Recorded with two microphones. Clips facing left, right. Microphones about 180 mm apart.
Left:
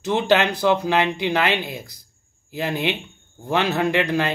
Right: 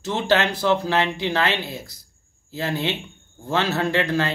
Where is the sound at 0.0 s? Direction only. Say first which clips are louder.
Left 2 dB; 20° left (ahead or behind).